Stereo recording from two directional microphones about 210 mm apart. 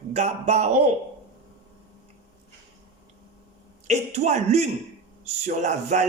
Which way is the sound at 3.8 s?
30° right (ahead or behind).